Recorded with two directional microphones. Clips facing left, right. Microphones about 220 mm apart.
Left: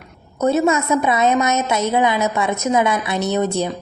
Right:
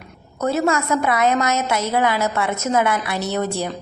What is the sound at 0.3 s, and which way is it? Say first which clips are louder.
A woman's voice: left 3 dB; 20° left (ahead or behind).